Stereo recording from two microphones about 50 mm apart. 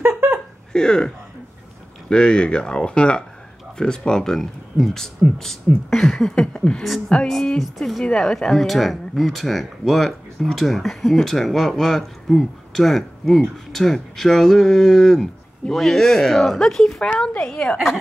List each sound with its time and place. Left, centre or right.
0.1 s a sound: right
0.7 s speech: centre
7.5 s speech: centre
8.0 s speech: centre